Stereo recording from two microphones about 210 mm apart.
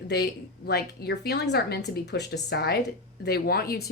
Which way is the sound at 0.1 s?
50° left (ahead or behind).